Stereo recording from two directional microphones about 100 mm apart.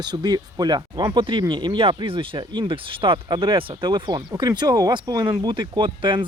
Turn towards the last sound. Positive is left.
turn(degrees=-55)  # may be behind; listen again after turning